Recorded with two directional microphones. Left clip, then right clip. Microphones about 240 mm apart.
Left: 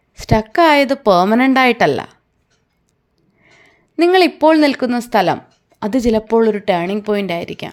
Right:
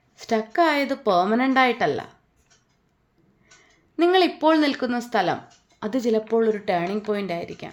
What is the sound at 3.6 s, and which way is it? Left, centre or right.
A woman's voice, left.